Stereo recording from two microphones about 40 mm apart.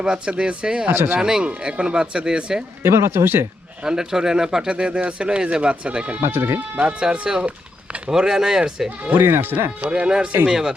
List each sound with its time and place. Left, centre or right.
0.0 s speech: right
0.9 s speech: right
1.2 s speech: centre
2.8 s speech: right
3.8 s speech: centre
6.1 s speech: right
7.0 s speech: centre
9.1 s speech: right
9.8 s speech: right